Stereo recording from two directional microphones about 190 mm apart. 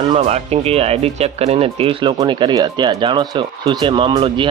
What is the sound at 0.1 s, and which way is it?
Speech, 35° right (ahead or behind).